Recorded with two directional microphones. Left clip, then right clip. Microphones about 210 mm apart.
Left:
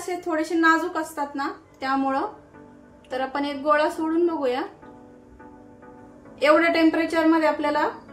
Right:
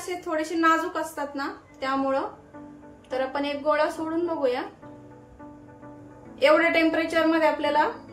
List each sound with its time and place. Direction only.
0.0 s a woman's voice: 15° left (ahead or behind)
6.4 s a woman's voice: 15° left (ahead or behind)